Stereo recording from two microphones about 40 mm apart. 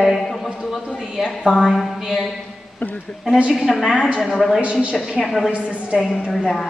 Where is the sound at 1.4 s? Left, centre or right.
Centre.